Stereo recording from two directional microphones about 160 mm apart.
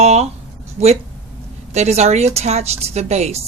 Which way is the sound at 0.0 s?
40° right (ahead or behind).